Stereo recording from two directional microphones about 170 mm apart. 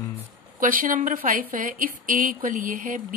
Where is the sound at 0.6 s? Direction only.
55° right (ahead or behind).